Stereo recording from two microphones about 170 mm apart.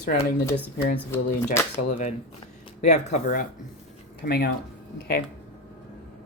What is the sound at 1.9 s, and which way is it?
Speech, 45° left (ahead or behind).